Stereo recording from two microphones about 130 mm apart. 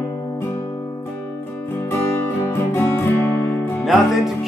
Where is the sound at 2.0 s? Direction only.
15° left (ahead or behind).